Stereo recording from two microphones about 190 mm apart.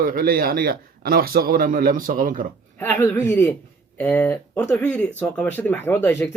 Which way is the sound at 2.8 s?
10° left (ahead or behind).